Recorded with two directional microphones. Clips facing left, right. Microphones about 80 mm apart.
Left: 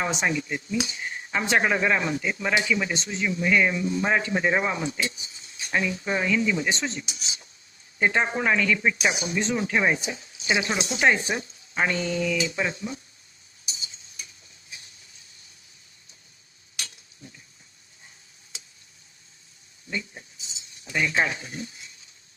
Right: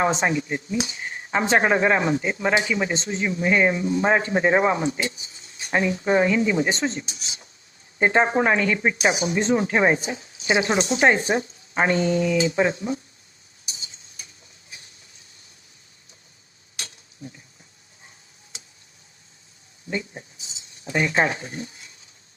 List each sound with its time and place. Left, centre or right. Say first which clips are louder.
0.0 s speech: right 5 dB; right
9.0 s speech: right 4 dB; right
16.7 s mechanisms: right 1 dB; right
19.9 s speech: right 4 dB; right